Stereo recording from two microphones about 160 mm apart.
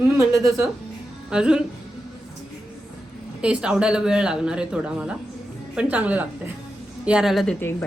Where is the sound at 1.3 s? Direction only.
5° right (ahead or behind).